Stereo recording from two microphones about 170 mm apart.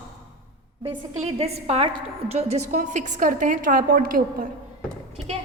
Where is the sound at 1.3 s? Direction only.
35° right (ahead or behind); by 4.4 s 60° right (ahead or behind).